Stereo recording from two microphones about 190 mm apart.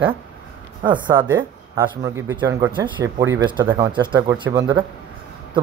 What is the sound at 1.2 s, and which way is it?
Speech, 25° right (ahead or behind).